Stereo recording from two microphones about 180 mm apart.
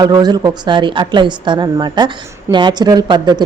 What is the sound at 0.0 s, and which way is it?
A woman's voice, 20° right (ahead or behind).